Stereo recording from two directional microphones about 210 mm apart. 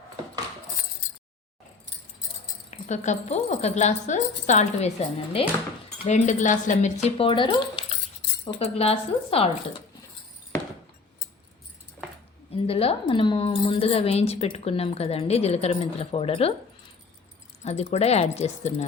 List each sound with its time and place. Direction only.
2.6 s speech: 35° left (ahead or behind)
12.6 s speech: 30° left (ahead or behind)
17.6 s speech: 30° left (ahead or behind)